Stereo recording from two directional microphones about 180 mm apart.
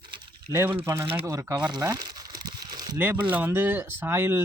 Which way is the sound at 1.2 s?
15° right (ahead or behind).